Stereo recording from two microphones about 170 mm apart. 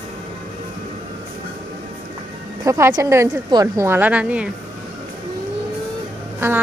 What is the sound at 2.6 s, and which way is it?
Speech, 20° right (ahead or behind).